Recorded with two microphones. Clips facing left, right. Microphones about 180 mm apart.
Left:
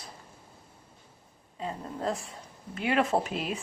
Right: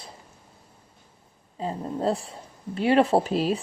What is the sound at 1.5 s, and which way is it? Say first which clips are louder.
A woman's voice: right 6 dB; 30° right (ahead or behind).